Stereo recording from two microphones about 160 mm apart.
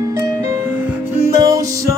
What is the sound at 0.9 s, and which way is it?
Music, 15° right (ahead or behind).